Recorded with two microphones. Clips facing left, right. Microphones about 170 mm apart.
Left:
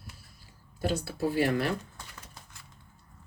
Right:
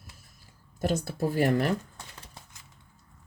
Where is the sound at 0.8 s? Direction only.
45° right (ahead or behind).